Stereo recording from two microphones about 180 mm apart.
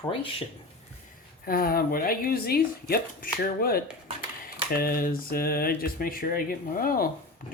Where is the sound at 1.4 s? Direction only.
55° left (ahead or behind).